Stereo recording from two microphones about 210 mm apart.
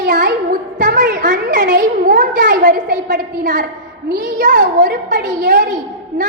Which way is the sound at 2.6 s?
40° right (ahead or behind).